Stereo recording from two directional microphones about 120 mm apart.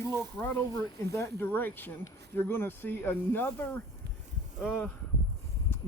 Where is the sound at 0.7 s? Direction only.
25° left (ahead or behind).